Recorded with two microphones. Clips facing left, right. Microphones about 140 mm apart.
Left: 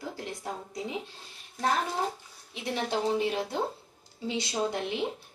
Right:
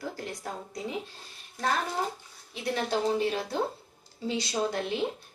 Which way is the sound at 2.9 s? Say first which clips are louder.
Even; 15° left (ahead or behind).